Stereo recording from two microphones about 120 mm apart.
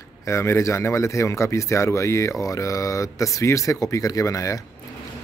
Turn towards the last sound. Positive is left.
turn(degrees=25)  # may be behind; listen again after turning